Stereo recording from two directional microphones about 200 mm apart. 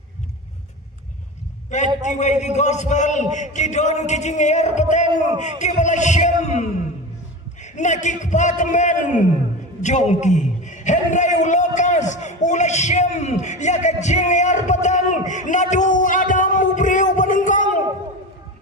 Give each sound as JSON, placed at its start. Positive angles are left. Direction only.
{"t": 2.0, "sound": "a man's voice", "side_deg": 35}
{"t": 5.0, "sound": "speech", "side_deg": -25}
{"t": 5.4, "sound": "a man's voice", "side_deg": 35}
{"t": 15.3, "sound": "a sound", "side_deg": 40}